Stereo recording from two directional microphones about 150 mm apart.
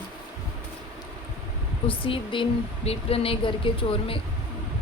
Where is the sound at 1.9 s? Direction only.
35° left (ahead or behind).